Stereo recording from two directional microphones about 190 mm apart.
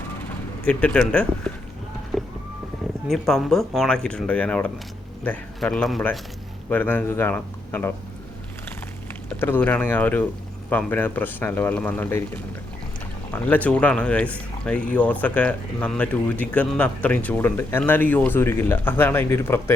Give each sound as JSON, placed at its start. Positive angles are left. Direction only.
{"t": 0.3, "sound": "speech", "side_deg": 5}
{"t": 2.1, "sound": "a sound", "side_deg": 0}
{"t": 3.1, "sound": "speech", "side_deg": 0}
{"t": 9.4, "sound": "speech", "side_deg": 10}
{"t": 13.3, "sound": "speech", "side_deg": 10}